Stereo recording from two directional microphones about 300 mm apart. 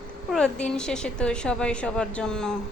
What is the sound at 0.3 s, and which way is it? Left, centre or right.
A woman's voice, centre.